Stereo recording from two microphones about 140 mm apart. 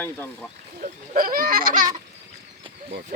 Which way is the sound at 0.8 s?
90° right.